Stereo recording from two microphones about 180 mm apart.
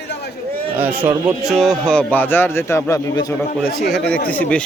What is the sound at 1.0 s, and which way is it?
Speech, 5° right (ahead or behind).